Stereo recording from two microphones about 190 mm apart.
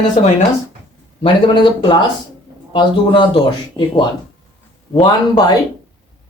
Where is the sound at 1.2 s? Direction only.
25° left (ahead or behind).